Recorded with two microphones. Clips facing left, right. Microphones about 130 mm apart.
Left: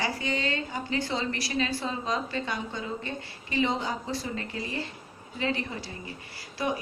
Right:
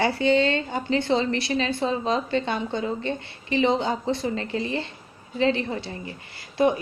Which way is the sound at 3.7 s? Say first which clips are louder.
Right 7 dB; 25° right (ahead or behind).